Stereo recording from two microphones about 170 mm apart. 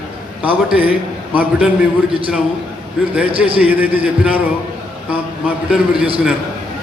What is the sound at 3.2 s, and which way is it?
A man's voice, 5° right (ahead or behind).